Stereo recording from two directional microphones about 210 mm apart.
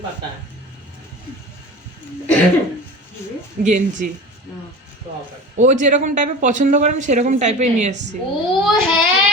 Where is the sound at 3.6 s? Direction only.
35° right (ahead or behind).